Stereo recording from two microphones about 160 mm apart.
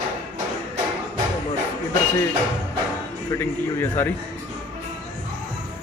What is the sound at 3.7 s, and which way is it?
Speech, 15° left (ahead or behind).